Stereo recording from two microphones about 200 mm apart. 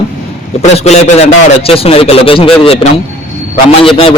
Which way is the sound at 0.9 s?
30° left (ahead or behind).